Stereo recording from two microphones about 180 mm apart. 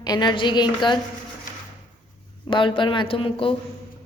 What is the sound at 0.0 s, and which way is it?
Speech, 25° left (ahead or behind).